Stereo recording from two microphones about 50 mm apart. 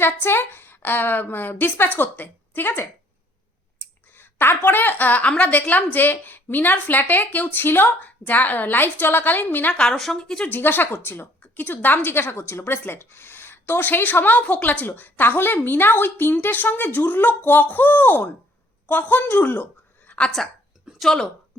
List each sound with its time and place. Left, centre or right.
0.0 s a woman's voice: left
4.1 s a woman's voice: left
9.7 s speech: centre
10.5 s a woman's voice: left
20.1 s a sound: left
21.0 s speech: centre